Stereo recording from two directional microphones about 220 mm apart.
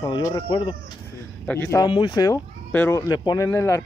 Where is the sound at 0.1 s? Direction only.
20° left (ahead or behind).